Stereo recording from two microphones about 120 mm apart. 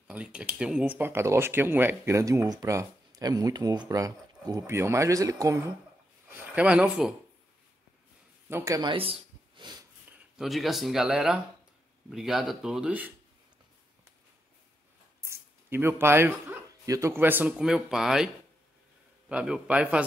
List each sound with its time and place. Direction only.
0.1 s speech: 10° right (ahead or behind); by 5.6 s 25° right (ahead or behind)
6.2 s speech: 15° right (ahead or behind)
8.5 s speech: 20° right (ahead or behind)
8.9 s a sound: 50° right (ahead or behind)
10.3 s speech: centre (ahead or behind)
15.2 s a sound: 20° right (ahead or behind)
16.9 s a man's voice: 20° right (ahead or behind)